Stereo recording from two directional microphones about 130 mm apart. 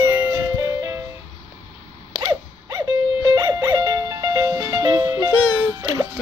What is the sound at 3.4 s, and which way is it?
Music, 25° right (ahead or behind).